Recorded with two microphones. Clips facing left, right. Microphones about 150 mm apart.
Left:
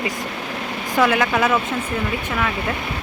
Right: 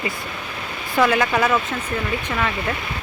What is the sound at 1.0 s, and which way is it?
Speech, 5° left (ahead or behind).